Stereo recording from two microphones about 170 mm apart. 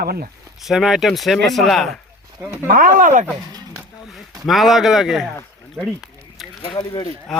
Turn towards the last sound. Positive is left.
turn(degrees=0)  # may be behind; listen again after turning